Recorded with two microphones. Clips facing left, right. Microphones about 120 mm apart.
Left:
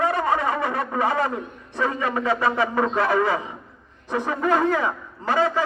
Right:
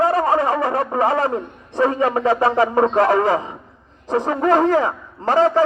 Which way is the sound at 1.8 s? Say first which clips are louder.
Right 7 dB; 35° right (ahead or behind).